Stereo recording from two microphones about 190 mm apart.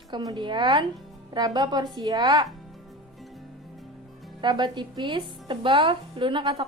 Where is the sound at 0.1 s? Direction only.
20° right (ahead or behind).